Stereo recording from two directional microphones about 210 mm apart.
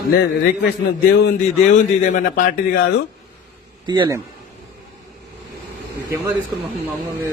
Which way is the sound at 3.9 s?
15° right (ahead or behind).